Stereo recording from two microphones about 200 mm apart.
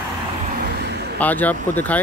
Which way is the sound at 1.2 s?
10° left (ahead or behind).